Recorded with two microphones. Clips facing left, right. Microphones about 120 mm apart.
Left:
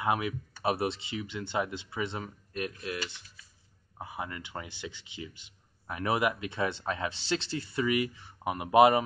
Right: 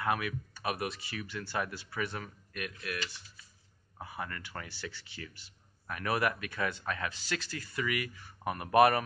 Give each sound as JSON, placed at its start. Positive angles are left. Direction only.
{"t": 0.0, "sound": "speech", "side_deg": 20}